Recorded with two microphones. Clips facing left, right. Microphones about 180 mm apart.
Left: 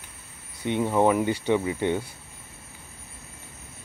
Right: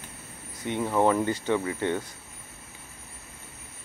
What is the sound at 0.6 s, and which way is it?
Speech, 20° left (ahead or behind).